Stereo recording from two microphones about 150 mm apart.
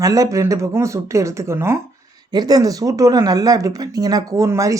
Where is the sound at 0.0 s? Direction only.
25° right (ahead or behind).